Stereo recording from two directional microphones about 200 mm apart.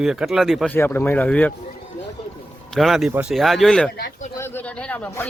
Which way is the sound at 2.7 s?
Centre (ahead or behind).